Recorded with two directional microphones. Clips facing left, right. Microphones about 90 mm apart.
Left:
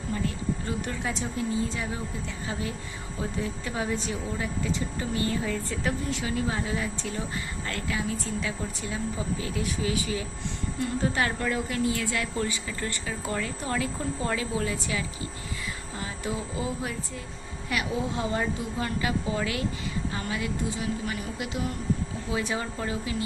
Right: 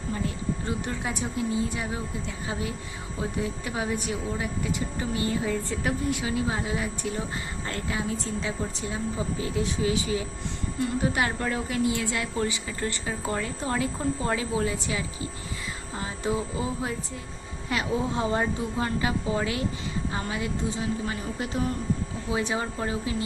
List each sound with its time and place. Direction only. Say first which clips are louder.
0.6 s speech: right 1 dB; 20° right (ahead or behind)
3.2 s speech: right 2 dB; 20° right (ahead or behind); by 21.7 s 35° right (ahead or behind)
22.3 s speech: right 2 dB; 25° right (ahead or behind)